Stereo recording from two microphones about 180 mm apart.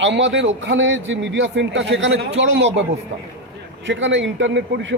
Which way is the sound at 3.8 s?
90° right.